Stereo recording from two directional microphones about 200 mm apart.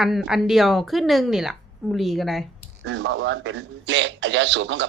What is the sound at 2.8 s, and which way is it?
Speech, 65° right (ahead or behind).